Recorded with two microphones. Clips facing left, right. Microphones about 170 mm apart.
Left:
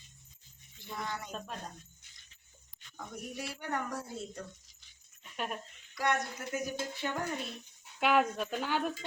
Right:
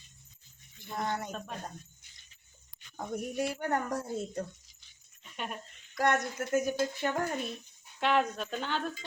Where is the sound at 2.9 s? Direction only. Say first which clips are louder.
Right 8 dB; 50° right (ahead or behind).